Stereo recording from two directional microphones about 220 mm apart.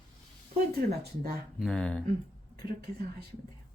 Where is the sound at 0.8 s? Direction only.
40° right (ahead or behind).